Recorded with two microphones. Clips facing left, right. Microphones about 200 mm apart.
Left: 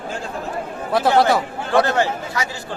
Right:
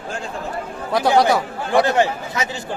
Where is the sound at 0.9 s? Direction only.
5° left (ahead or behind).